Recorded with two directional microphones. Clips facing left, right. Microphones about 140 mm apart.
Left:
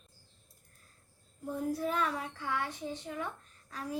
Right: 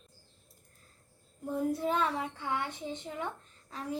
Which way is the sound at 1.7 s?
25° right (ahead or behind).